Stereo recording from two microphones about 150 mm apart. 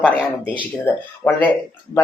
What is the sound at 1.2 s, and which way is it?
Speech, 5° left (ahead or behind).